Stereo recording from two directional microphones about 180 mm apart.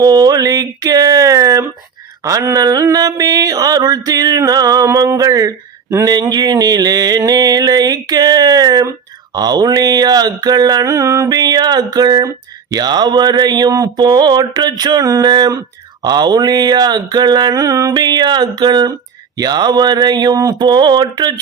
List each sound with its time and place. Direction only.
0.0 s mantra: 20° right (ahead or behind)